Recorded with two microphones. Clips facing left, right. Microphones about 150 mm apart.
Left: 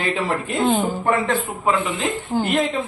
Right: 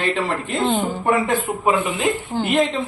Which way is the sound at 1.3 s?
15° right (ahead or behind).